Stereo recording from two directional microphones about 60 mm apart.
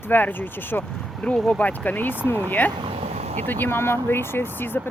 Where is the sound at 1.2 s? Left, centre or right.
Centre.